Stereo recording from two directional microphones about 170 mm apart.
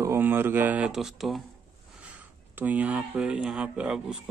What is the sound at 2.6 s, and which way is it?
Speech, 10° right (ahead or behind).